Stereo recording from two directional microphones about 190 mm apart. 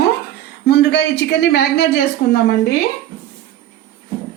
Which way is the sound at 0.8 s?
65° left (ahead or behind).